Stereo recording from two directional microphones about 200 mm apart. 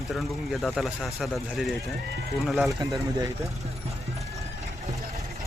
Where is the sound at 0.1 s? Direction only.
Centre (ahead or behind).